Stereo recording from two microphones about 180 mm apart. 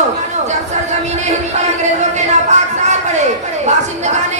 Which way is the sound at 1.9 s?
40° right (ahead or behind).